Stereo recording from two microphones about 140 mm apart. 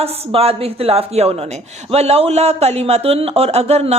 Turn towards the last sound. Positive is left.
turn(degrees=-50)  # may be behind; listen again after turning